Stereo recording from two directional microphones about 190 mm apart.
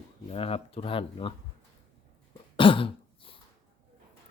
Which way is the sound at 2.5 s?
25° left (ahead or behind).